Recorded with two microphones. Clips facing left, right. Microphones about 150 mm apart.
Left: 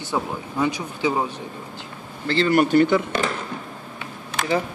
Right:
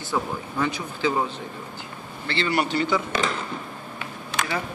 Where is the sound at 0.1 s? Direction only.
15° left (ahead or behind).